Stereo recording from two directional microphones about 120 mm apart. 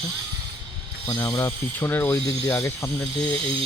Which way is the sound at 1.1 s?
25° left (ahead or behind).